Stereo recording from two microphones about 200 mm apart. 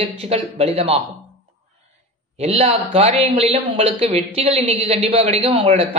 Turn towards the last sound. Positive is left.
turn(degrees=-30)  # may be behind; listen again after turning